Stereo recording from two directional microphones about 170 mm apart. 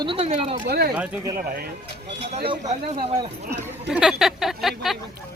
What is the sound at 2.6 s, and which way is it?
Speech, 45° right (ahead or behind).